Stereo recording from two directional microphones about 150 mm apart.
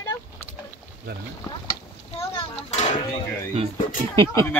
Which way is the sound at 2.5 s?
50° left (ahead or behind).